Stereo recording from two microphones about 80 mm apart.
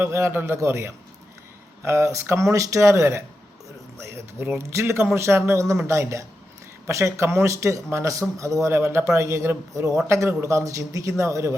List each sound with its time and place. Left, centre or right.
0.0 s speech: right